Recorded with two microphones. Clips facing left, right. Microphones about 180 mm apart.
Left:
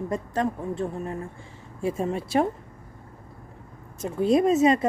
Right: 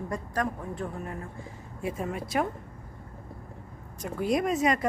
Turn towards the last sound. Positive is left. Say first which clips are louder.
# left 6 dB
turn(degrees=25)  # may be behind; listen again after turning